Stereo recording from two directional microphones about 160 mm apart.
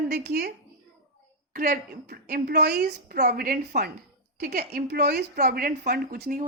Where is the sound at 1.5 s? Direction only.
65° right (ahead or behind).